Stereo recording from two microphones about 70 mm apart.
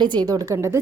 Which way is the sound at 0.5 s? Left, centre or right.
Right.